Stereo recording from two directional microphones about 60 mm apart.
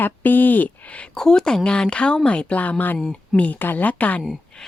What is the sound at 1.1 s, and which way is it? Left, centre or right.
Speech, centre.